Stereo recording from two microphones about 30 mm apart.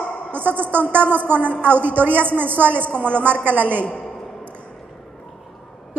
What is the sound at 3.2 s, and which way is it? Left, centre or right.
Speech, right.